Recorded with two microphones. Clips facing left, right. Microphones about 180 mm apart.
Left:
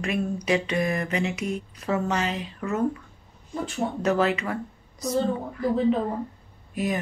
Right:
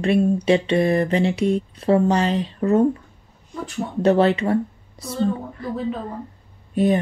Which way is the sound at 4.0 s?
30° right (ahead or behind).